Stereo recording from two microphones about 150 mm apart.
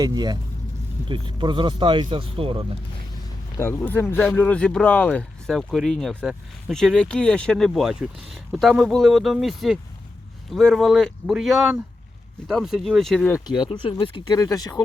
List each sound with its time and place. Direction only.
0.0 s speech: 25° right (ahead or behind)
3.6 s speech: 15° left (ahead or behind)
13.5 s speech: 30° left (ahead or behind)